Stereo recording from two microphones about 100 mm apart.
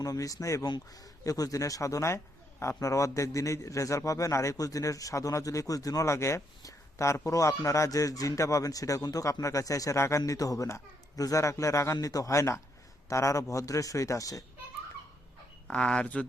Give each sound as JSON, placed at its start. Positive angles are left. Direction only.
{"t": 0.0, "sound": "a man's voice", "side_deg": 35}
{"t": 15.6, "sound": "speech", "side_deg": 10}